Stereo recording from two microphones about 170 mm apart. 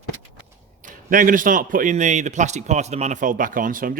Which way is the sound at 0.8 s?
50° right (ahead or behind).